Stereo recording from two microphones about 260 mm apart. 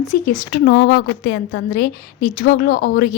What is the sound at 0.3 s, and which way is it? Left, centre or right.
A woman's voice, left.